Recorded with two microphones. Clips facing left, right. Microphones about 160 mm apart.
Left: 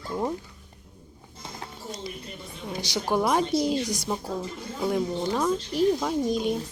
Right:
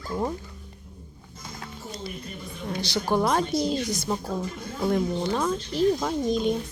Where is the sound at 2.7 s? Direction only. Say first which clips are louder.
Right 1 dB; 10° left (ahead or behind).